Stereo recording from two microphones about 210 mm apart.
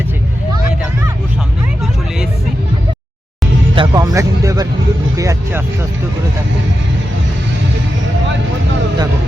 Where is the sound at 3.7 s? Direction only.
20° right (ahead or behind).